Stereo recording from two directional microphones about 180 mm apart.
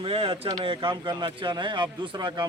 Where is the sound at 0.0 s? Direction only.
30° right (ahead or behind).